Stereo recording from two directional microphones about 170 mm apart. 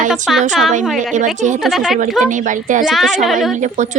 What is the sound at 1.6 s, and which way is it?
Speech, centre (ahead or behind).